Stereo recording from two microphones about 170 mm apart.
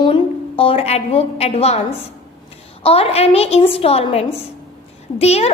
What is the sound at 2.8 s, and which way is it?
A woman's voice, 35° left (ahead or behind).